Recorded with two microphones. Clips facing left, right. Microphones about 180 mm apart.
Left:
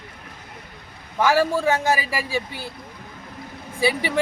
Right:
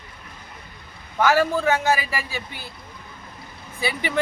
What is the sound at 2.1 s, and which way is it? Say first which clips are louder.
Speech: left 4 dB; 15° left (ahead or behind).